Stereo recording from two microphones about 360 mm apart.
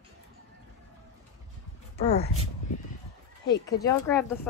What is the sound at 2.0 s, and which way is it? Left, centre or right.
Speech, centre.